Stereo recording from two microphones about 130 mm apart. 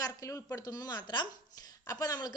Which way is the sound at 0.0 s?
25° left (ahead or behind).